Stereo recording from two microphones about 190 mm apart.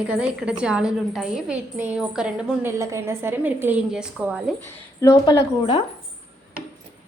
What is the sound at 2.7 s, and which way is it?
A woman's voice, 15° right (ahead or behind).